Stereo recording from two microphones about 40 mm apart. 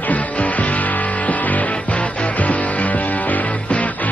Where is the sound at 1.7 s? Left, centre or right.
Left.